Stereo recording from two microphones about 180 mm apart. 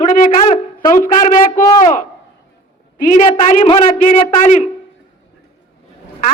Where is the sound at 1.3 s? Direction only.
20° left (ahead or behind).